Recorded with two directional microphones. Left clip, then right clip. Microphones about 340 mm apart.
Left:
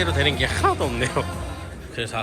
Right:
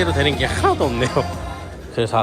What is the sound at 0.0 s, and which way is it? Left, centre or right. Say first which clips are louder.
Speech: right 3 dB; centre.